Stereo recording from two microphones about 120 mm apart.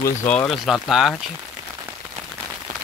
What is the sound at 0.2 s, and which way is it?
Speech, 20° left (ahead or behind).